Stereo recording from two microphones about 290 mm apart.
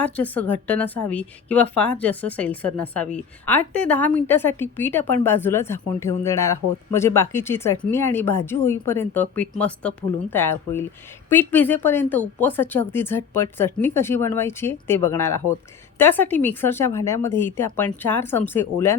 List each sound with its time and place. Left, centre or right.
0.0 s a woman's voice: centre